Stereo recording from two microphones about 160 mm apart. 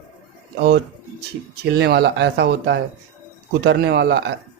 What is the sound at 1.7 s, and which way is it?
Speech, 90° right.